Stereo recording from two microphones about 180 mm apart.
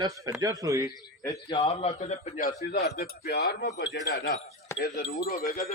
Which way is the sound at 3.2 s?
70° left (ahead or behind).